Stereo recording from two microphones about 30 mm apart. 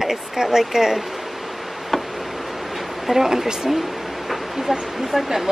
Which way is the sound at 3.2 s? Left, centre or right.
Right.